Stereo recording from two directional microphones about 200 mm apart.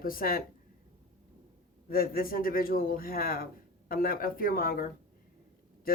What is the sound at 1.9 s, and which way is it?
A woman's voice, 45° left (ahead or behind).